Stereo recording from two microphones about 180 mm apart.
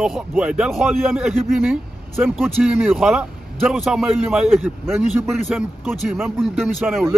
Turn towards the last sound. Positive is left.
turn(degrees=0)  # may be behind; listen again after turning